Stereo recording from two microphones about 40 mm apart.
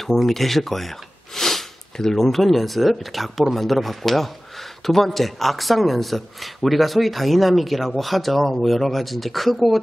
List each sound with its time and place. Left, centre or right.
0.0 s speech: centre